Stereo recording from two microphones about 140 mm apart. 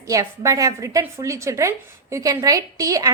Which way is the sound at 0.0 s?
25° right (ahead or behind).